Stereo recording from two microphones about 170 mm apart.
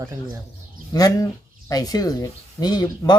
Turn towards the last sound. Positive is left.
turn(degrees=25)  # may be behind; listen again after turning